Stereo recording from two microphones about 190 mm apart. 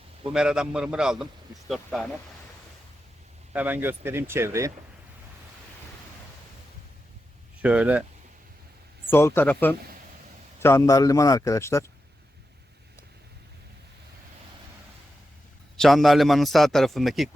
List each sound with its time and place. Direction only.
0.3 s a man's voice: 5° right (ahead or behind)
3.5 s speech: 10° right (ahead or behind)
7.6 s speech: 5° right (ahead or behind)
9.0 s a man's voice: 10° left (ahead or behind)
15.8 s a man's voice: centre (ahead or behind)